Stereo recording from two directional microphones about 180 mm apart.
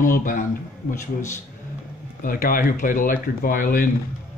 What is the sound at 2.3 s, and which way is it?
Speech, 50° left (ahead or behind).